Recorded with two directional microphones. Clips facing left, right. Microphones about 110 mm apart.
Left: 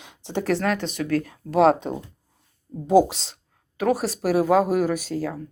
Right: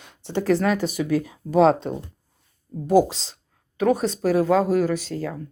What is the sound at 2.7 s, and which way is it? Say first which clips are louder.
Speech: right 1 dB; 15° left (ahead or behind).